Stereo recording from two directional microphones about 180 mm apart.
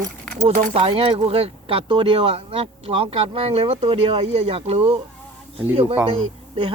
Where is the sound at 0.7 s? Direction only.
30° right (ahead or behind).